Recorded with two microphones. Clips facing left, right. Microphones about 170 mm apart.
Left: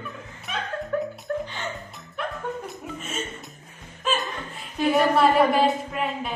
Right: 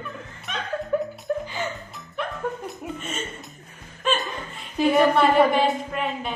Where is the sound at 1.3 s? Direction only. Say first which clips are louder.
Right 2 dB; 15° right (ahead or behind).